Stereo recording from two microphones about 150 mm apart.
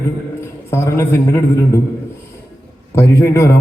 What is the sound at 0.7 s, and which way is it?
A man's voice, 15° left (ahead or behind).